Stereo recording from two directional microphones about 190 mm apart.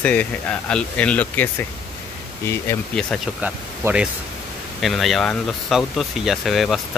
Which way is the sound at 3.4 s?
10° right (ahead or behind).